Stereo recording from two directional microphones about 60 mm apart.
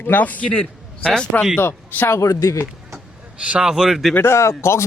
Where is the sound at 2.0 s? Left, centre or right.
Left.